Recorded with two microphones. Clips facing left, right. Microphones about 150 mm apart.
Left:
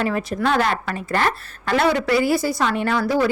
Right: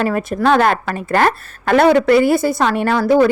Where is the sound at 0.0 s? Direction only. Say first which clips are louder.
Right 5 dB; 50° right (ahead or behind).